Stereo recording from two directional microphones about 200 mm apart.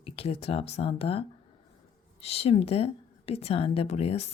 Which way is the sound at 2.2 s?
30° left (ahead or behind).